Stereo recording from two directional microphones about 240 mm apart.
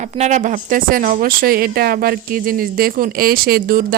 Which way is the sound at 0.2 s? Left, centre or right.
Right.